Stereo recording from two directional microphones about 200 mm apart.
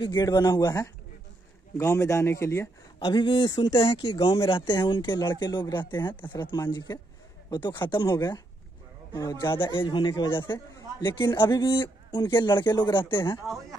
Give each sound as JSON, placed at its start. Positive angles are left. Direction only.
{"t": 0.0, "sound": "speech", "side_deg": 20}